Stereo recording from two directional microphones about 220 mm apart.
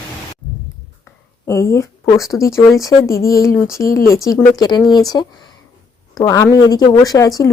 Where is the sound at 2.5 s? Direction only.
Centre (ahead or behind).